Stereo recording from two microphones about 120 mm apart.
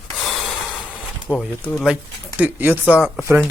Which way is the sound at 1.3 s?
10° left (ahead or behind).